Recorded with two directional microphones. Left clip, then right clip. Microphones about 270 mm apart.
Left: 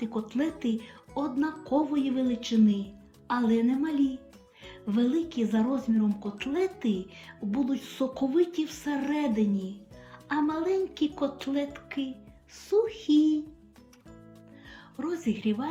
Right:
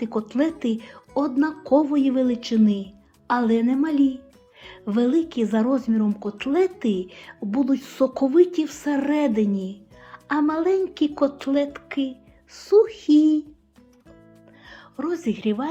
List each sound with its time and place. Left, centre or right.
0.0 s speech: centre
14.7 s speech: centre